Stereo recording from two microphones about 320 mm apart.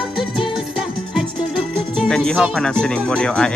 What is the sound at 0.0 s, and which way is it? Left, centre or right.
Music, centre.